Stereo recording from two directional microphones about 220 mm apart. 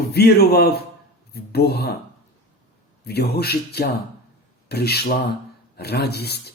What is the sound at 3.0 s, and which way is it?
Speech, 45° left (ahead or behind).